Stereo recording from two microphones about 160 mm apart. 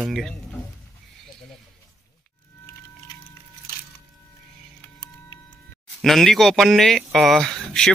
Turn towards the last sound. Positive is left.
turn(degrees=5)  # may be behind; listen again after turning